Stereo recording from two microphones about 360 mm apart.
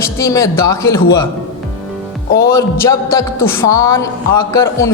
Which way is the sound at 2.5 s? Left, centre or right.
Centre.